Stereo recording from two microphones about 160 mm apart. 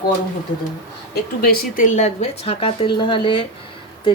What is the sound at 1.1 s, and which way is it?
A woman's voice, 70° left (ahead or behind).